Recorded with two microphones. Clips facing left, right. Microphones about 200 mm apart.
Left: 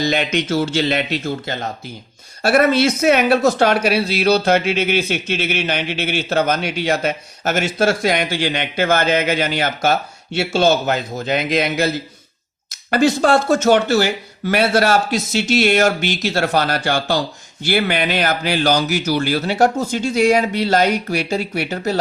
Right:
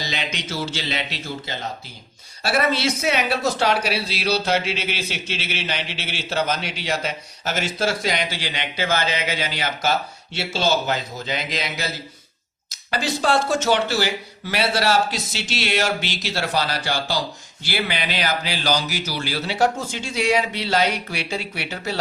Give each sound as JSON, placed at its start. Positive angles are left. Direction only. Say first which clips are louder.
{"t": 0.0, "sound": "speech", "louder": "left 11 dB", "side_deg": 55}
{"t": 12.9, "sound": "speech", "louder": "left 7 dB", "side_deg": 50}